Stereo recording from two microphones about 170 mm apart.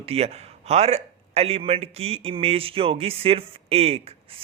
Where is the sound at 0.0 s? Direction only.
35° right (ahead or behind).